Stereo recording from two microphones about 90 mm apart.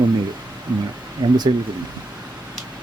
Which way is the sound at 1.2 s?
50° right (ahead or behind).